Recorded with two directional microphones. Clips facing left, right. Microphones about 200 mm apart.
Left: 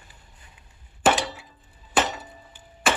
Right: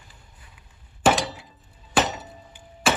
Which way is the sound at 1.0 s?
5° right (ahead or behind).